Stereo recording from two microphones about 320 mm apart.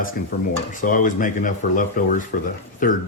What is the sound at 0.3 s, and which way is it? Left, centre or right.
Speech, left.